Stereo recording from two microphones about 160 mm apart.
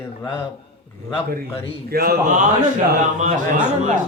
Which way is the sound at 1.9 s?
70° right (ahead or behind).